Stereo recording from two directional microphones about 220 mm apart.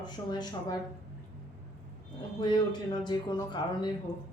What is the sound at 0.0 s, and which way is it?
Speech, 20° left (ahead or behind).